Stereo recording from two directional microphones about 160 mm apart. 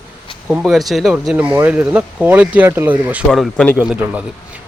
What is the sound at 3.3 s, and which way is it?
Speech, 5° left (ahead or behind).